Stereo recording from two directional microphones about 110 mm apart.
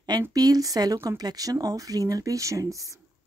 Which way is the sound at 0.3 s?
35° right (ahead or behind).